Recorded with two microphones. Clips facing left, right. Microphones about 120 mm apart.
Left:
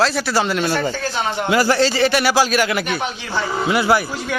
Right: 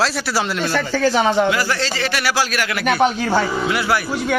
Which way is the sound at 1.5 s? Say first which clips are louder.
Left 4 dB; 30° left (ahead or behind).